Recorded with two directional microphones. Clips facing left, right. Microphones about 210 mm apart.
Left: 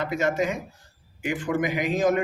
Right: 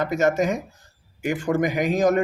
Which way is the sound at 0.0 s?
45° right (ahead or behind).